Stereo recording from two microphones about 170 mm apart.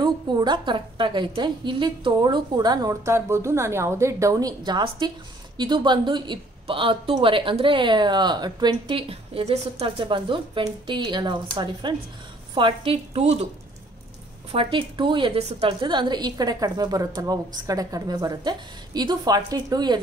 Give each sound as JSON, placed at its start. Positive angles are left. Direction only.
{"t": 0.0, "sound": "a woman's voice", "side_deg": -25}
{"t": 14.5, "sound": "speech", "side_deg": -30}